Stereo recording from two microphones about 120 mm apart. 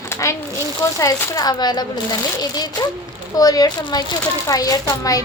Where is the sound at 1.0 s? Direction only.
35° left (ahead or behind).